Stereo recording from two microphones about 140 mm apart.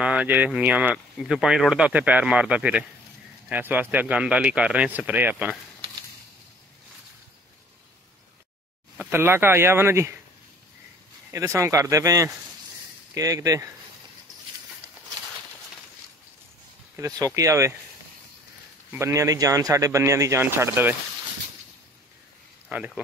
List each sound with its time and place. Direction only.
0.0 s speech: 10° right (ahead or behind)
9.1 s speech: 15° right (ahead or behind)
11.3 s speech: 20° right (ahead or behind)
16.9 s speech: 25° right (ahead or behind)
18.9 s speech: 20° right (ahead or behind)
22.7 s speech: 10° right (ahead or behind)